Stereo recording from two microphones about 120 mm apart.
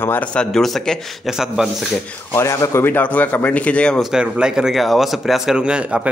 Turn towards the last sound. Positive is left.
turn(degrees=-10)  # may be behind; listen again after turning